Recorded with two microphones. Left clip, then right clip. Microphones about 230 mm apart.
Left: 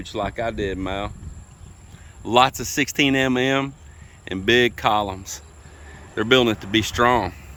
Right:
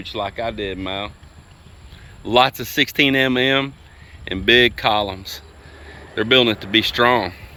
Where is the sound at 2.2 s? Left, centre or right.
Centre.